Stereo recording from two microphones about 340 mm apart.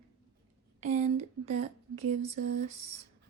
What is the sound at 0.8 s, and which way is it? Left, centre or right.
Speech, centre.